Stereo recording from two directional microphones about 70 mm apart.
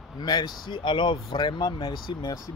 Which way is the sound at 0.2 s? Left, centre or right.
Left.